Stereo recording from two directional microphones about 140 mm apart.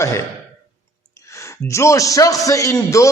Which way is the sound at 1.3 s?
20° left (ahead or behind).